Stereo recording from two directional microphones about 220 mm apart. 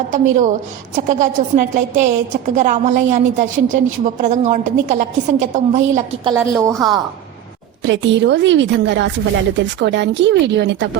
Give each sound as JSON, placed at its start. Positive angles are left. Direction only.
{"t": 0.1, "sound": "a woman's voice", "side_deg": -35}
{"t": 6.6, "sound": "a woman's voice", "side_deg": -15}
{"t": 7.8, "sound": "a woman's voice", "side_deg": -55}